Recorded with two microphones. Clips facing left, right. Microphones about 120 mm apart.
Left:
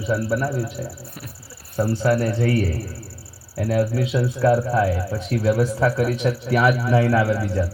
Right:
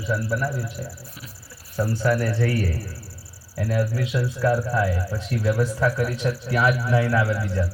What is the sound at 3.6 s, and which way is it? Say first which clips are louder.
A man's voice: left 4 dB; 25° left (ahead or behind).